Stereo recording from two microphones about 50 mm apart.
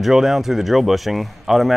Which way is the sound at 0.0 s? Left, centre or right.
Centre.